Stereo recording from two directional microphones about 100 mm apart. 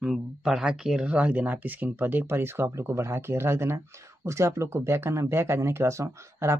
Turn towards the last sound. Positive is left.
turn(degrees=-30)  # may be behind; listen again after turning